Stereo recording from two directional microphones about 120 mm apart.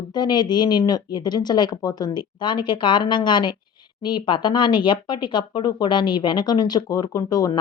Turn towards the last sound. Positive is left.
turn(degrees=30)  # may be behind; listen again after turning